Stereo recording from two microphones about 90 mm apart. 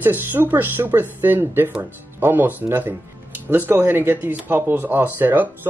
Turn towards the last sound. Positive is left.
turn(degrees=-20)  # may be behind; listen again after turning